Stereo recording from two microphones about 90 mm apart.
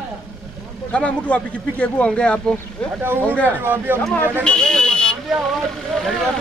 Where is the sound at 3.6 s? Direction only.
25° right (ahead or behind).